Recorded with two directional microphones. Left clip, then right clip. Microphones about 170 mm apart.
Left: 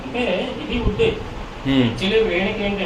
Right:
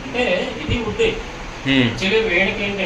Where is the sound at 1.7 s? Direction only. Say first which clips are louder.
Right 2 dB; 15° left (ahead or behind).